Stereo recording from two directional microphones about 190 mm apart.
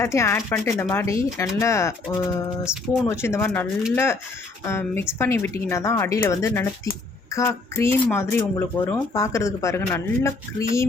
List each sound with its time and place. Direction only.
0.0 s speech: 15° left (ahead or behind)